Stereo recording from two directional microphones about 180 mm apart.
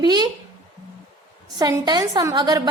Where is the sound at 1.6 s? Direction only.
20° right (ahead or behind).